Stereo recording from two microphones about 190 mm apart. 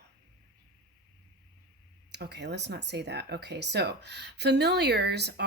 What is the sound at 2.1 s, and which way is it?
Speech, 65° right (ahead or behind).